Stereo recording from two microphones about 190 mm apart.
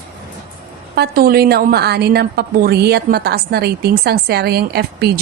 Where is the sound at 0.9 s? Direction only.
55° right (ahead or behind).